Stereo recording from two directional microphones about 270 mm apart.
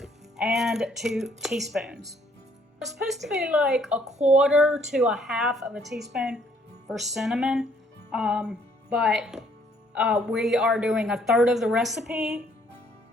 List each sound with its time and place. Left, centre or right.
0.0 s a woman's voice: centre
4.0 s speech: right
4.4 s a woman's voice: centre
8.1 s music: centre
9.9 s a woman's voice: centre